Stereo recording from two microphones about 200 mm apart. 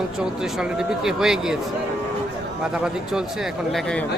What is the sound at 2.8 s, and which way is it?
Speech, 5° right (ahead or behind).